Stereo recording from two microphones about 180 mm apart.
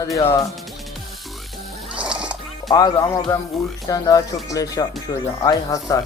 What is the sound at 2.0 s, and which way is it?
Music, 5° right (ahead or behind).